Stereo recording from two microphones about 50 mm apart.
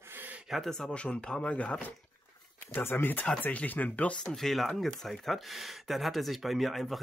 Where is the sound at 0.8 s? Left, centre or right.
Left.